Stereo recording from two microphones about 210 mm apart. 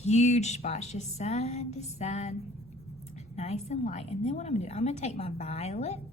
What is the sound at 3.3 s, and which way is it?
Speech, 30° left (ahead or behind).